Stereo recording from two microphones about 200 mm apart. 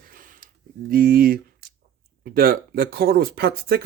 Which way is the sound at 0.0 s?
45° right (ahead or behind).